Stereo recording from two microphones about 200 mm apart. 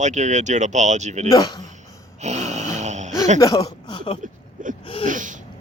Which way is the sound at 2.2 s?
35° right (ahead or behind).